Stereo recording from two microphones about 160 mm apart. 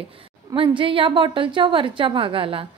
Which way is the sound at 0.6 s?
30° right (ahead or behind).